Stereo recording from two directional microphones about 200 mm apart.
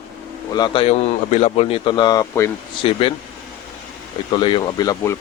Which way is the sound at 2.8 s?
30° left (ahead or behind).